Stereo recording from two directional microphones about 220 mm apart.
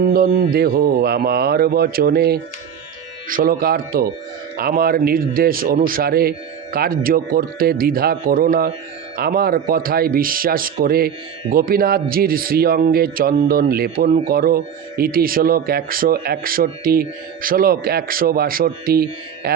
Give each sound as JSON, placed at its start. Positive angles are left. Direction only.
{"t": 0.0, "sound": "speech", "side_deg": -40}